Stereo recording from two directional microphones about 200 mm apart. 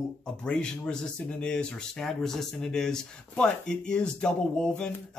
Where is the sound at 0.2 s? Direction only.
5° left (ahead or behind).